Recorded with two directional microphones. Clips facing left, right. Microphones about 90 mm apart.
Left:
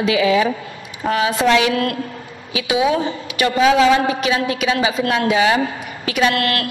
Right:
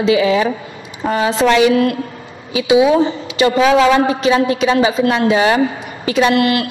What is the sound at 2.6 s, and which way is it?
Speech, 20° right (ahead or behind).